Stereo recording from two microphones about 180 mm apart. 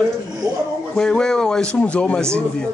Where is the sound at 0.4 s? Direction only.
20° right (ahead or behind).